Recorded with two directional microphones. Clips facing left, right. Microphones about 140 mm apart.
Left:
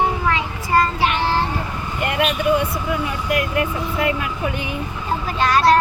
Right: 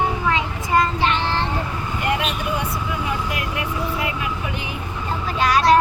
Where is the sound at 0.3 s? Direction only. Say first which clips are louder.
Left 1 dB; 20° right (ahead or behind).